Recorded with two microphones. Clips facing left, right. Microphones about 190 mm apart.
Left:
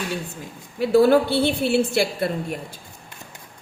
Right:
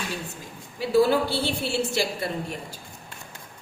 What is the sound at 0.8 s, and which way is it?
A woman's voice, 55° left (ahead or behind).